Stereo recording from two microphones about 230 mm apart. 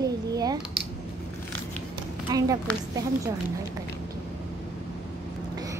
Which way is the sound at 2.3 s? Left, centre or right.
Centre.